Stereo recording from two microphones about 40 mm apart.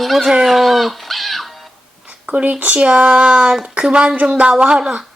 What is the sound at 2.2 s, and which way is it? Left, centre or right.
Speech, right.